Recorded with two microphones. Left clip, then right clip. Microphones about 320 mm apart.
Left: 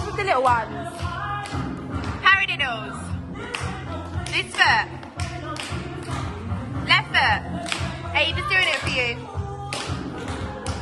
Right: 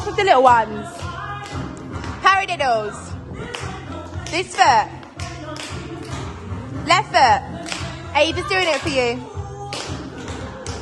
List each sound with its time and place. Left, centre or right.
0.2 s speech: right
2.2 s a woman's voice: right
4.4 s speech: centre
6.8 s speech: right